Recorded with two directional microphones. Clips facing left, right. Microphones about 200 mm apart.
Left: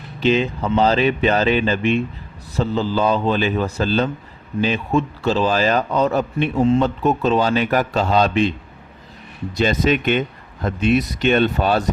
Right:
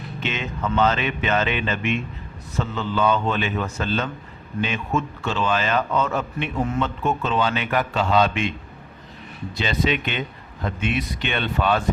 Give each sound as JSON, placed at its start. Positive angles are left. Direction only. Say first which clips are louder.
{"t": 0.2, "sound": "a man's voice", "louder": "left 10 dB", "side_deg": 35}
{"t": 9.6, "sound": "a man's voice", "louder": "left 6 dB", "side_deg": 45}